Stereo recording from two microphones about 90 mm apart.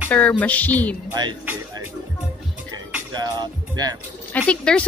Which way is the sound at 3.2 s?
45° right (ahead or behind).